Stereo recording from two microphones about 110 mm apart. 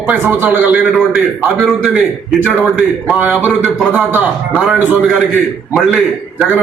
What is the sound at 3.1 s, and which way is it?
A man's voice, 10° right (ahead or behind).